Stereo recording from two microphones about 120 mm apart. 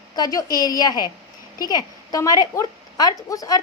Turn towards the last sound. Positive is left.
turn(degrees=30)  # may be behind; listen again after turning